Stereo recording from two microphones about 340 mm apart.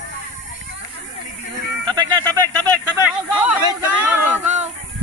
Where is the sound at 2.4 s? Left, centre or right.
Centre.